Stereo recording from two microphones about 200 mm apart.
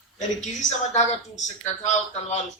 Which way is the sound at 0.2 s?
35° left (ahead or behind).